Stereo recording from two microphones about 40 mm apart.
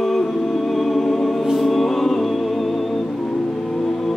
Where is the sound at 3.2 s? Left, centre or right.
Centre.